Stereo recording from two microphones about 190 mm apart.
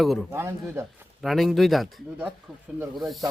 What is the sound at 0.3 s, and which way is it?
Speech, 15° right (ahead or behind).